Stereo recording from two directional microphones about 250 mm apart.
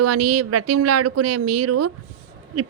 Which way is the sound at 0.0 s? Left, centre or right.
Right.